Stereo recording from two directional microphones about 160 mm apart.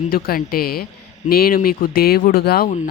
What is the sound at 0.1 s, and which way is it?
Speech, 70° left (ahead or behind).